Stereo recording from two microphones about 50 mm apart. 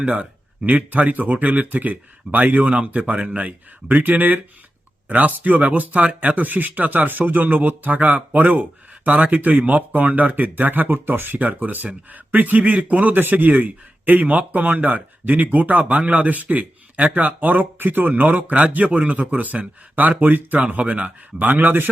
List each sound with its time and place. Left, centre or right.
0.0 s a man's voice: right